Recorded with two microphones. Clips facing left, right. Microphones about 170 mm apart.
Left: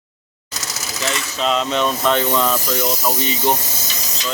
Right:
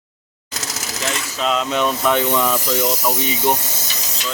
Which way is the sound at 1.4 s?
5° right (ahead or behind).